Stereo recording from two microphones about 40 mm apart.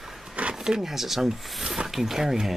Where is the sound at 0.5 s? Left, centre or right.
Centre.